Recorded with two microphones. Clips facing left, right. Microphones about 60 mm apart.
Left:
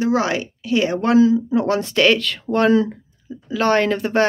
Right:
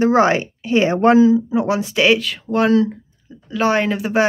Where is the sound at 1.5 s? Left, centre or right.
Centre.